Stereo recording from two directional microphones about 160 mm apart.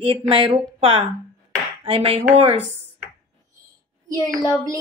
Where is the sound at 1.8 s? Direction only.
35° right (ahead or behind).